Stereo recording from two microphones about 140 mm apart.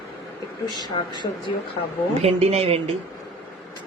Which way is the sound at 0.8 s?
30° left (ahead or behind).